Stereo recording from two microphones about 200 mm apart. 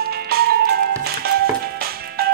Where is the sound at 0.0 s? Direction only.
50° right (ahead or behind).